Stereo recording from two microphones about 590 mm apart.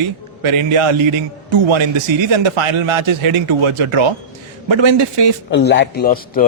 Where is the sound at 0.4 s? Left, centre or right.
Right.